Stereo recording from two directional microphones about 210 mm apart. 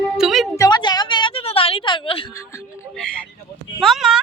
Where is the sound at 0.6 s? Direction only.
20° left (ahead or behind).